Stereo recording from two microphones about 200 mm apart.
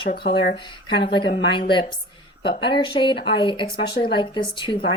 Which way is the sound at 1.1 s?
25° left (ahead or behind).